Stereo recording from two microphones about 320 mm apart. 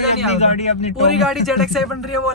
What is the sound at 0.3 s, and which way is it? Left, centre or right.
Speech, centre.